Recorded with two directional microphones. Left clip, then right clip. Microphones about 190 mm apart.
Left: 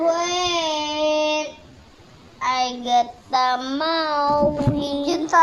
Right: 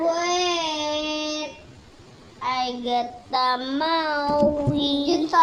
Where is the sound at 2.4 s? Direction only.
35° left (ahead or behind); by 4.5 s 10° left (ahead or behind).